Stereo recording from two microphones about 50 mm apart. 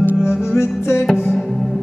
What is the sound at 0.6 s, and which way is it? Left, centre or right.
Music, left.